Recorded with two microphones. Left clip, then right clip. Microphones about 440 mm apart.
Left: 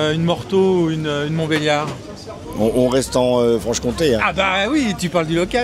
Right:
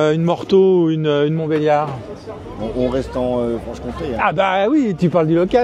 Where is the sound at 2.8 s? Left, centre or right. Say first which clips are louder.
Left 3 dB; left.